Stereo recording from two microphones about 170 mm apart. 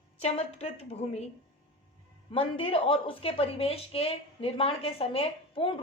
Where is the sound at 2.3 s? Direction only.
35° left (ahead or behind).